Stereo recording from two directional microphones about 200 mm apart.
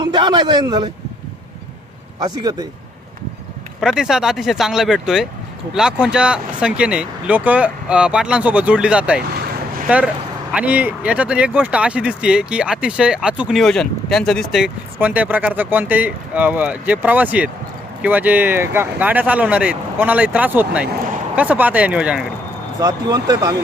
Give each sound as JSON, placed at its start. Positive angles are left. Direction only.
{"t": 0.0, "sound": "a man's voice", "side_deg": -20}
{"t": 2.1, "sound": "speech", "side_deg": -20}
{"t": 3.8, "sound": "speech", "side_deg": -5}
{"t": 22.8, "sound": "speech", "side_deg": -20}